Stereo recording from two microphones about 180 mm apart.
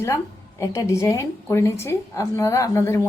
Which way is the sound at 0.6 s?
20° left (ahead or behind).